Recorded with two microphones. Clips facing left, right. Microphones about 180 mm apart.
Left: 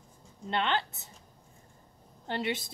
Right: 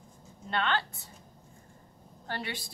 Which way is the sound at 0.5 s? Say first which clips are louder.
Left 1 dB; 20° left (ahead or behind).